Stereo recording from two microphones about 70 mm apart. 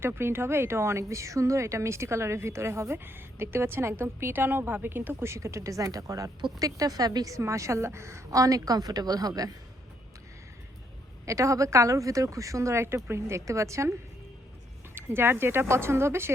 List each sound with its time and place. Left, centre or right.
0.0 s a woman's voice: right
11.3 s speech: right
14.9 s a woman's voice: right